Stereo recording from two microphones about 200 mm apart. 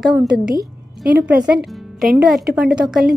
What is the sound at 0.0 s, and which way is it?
Speech, centre (ahead or behind).